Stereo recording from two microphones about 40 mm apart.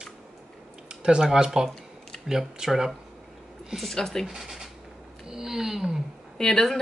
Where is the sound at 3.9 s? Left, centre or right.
Centre.